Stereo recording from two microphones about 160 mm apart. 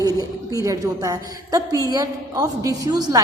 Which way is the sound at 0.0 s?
20° right (ahead or behind).